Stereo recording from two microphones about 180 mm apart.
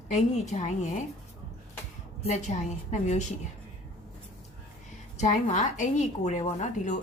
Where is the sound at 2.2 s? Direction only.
40° left (ahead or behind).